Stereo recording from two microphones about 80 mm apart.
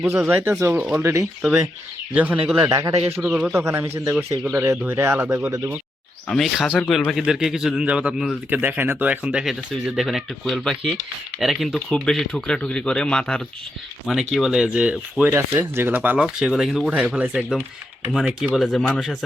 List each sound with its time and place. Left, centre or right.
0.1 s speech: right
2.1 s speech: centre
2.6 s speech: right
3.2 s speech: centre
3.5 s speech: right
6.2 s speech: centre
7.2 s speech: centre
14.1 s speech: centre
15.2 s speech: right
16.0 s speech: centre
18.5 s speech: centre